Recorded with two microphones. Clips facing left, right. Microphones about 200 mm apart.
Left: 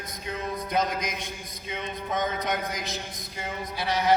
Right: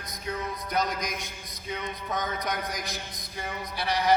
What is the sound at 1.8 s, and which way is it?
Speech, 25° left (ahead or behind).